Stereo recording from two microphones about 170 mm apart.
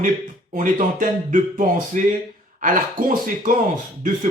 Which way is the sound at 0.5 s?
50° right (ahead or behind).